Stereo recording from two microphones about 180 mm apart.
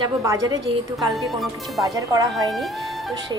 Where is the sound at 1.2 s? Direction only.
Centre (ahead or behind).